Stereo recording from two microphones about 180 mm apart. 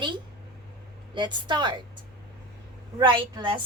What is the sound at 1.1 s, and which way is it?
Speech, 25° right (ahead or behind).